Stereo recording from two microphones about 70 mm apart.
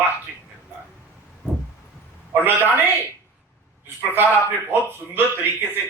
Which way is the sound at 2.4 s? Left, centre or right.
Right.